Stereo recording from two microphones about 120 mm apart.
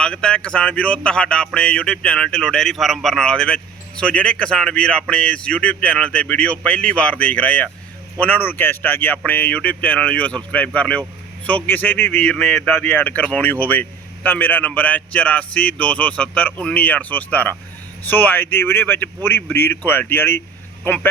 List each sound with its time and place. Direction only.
0.0 s speech: 5° left (ahead or behind)